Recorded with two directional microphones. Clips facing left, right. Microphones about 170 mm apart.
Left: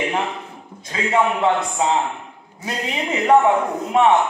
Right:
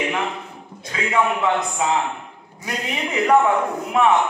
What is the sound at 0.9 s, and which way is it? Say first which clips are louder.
A man's voice: left 2 dB; 30° left (ahead or behind).